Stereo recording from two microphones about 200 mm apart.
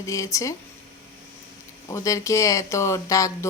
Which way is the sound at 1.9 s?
15° left (ahead or behind).